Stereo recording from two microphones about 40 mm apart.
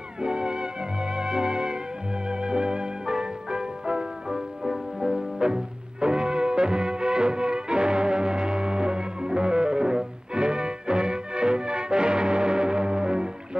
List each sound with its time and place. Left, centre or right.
0.2 s music: right